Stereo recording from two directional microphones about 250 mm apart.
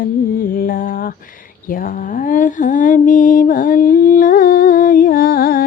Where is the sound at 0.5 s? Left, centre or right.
Left.